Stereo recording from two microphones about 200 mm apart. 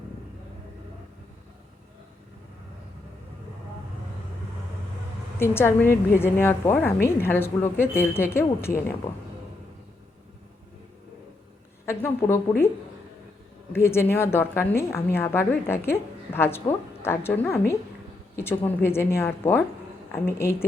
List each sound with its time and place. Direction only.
5.4 s a woman's voice: 10° left (ahead or behind)
11.9 s a woman's voice: 10° left (ahead or behind)
13.7 s a woman's voice: 10° left (ahead or behind)